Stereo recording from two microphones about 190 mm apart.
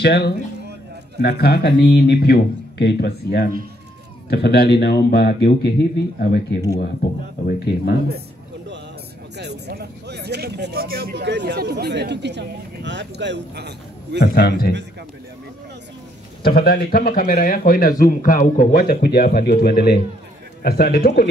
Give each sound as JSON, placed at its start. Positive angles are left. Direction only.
{"t": 0.0, "sound": "speech", "side_deg": 60}
{"t": 9.4, "sound": "speech", "side_deg": -60}
{"t": 14.2, "sound": "speech", "side_deg": 55}
{"t": 16.4, "sound": "speech", "side_deg": 50}